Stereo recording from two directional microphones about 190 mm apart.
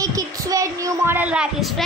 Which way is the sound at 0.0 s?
20° right (ahead or behind).